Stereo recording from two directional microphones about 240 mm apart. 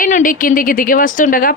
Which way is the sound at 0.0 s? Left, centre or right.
Left.